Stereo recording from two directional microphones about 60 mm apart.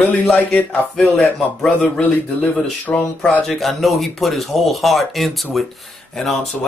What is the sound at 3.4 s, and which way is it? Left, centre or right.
Speech, centre.